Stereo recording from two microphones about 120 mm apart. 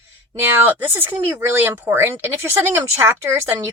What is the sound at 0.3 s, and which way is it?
Speech, 20° right (ahead or behind).